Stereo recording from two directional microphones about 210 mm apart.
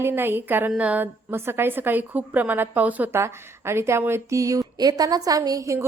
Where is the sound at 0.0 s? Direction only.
10° right (ahead or behind).